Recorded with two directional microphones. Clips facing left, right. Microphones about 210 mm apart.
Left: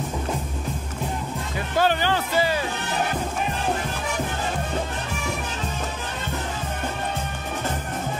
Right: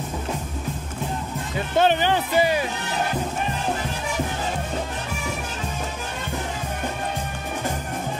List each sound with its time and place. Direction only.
1.8 s speech: 20° right (ahead or behind)